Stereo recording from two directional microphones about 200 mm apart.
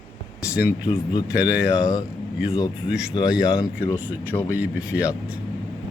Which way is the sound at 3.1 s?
20° left (ahead or behind).